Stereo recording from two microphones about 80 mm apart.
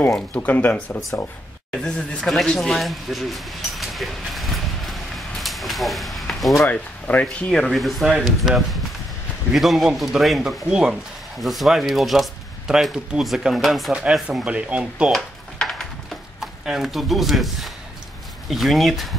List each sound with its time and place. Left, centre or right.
0.3 s speech: left
1.7 s speech: centre
2.3 s a sound: centre
6.7 s speech: centre
7.5 s speech: centre
14.2 s speech: centre
15.1 s a sound: centre
16.3 s speech: centre